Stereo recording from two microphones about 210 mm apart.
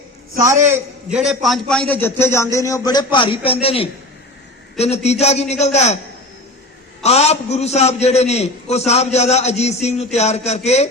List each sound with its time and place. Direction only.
0.3 s a man's voice: 15° right (ahead or behind); by 6.0 s 30° left (ahead or behind)
7.0 s a man's voice: 30° left (ahead or behind)